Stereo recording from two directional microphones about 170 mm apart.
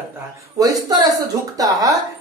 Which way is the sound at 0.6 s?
20° right (ahead or behind).